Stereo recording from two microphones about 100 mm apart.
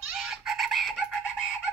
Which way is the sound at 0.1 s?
5° right (ahead or behind).